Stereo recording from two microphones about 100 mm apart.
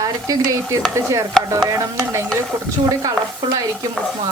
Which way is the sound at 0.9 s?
30° right (ahead or behind).